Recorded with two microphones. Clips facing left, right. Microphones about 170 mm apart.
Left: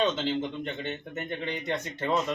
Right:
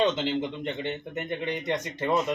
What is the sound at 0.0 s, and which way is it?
Speech, 15° right (ahead or behind).